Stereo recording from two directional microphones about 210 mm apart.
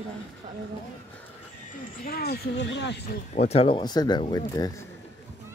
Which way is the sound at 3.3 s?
30° left (ahead or behind).